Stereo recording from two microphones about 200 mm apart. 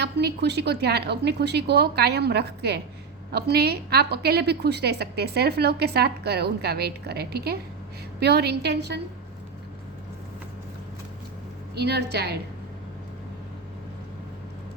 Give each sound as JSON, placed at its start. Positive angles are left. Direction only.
{"t": 0.0, "sound": "a woman's voice", "side_deg": -55}
{"t": 11.7, "sound": "a woman's voice", "side_deg": -55}